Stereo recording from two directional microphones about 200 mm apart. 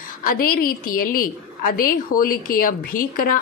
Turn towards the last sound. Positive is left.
turn(degrees=45)  # may be behind; listen again after turning